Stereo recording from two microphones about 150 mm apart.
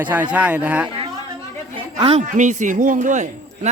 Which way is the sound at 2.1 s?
55° right (ahead or behind).